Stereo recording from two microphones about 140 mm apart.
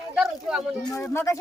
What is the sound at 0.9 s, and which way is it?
Speech, 20° left (ahead or behind).